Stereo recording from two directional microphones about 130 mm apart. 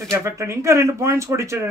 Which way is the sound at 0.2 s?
25° right (ahead or behind).